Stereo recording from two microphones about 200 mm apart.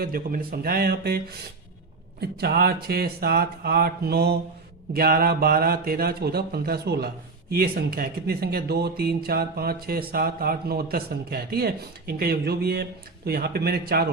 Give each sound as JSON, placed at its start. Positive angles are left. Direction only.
{"t": 0.0, "sound": "speech", "side_deg": -45}
{"t": 2.4, "sound": "speech", "side_deg": -50}